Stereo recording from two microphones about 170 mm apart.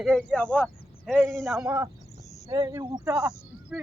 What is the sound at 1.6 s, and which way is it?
Speech, 15° right (ahead or behind).